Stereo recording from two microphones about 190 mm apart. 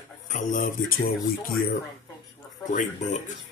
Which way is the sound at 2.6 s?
40° left (ahead or behind).